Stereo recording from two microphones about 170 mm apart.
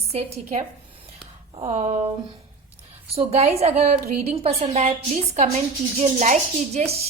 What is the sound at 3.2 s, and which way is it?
A woman's voice, 35° right (ahead or behind).